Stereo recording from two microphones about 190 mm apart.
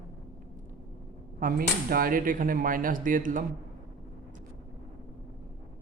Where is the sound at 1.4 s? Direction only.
50° right (ahead or behind).